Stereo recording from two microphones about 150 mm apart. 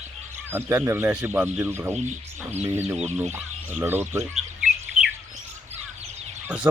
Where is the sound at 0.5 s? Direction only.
15° right (ahead or behind).